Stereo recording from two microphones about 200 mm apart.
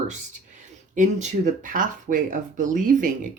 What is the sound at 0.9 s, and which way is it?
Speech, 40° right (ahead or behind).